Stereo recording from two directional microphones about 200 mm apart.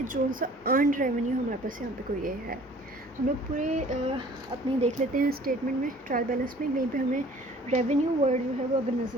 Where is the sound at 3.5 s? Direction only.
40° right (ahead or behind).